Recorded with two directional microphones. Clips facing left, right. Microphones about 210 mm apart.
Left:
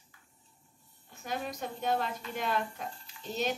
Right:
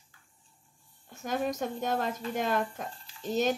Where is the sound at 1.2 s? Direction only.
45° right (ahead or behind).